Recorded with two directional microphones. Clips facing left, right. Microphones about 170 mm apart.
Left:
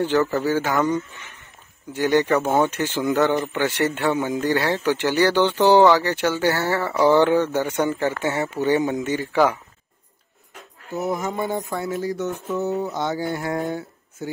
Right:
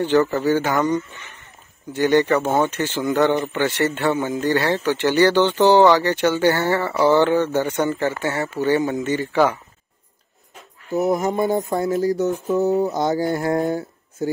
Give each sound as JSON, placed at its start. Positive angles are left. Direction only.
{"t": 0.0, "sound": "speech", "side_deg": 5}
{"t": 10.9, "sound": "speech", "side_deg": -35}